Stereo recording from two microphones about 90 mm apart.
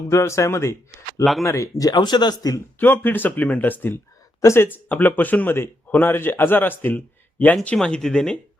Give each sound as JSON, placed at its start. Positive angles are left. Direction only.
{"t": 0.1, "sound": "speech", "side_deg": 35}
{"t": 1.2, "sound": "speech", "side_deg": 0}
{"t": 1.5, "sound": "speech", "side_deg": 35}
{"t": 1.9, "sound": "speech", "side_deg": 55}
{"t": 2.8, "sound": "speech", "side_deg": 25}